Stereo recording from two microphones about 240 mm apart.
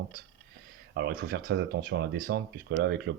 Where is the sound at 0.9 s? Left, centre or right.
Right.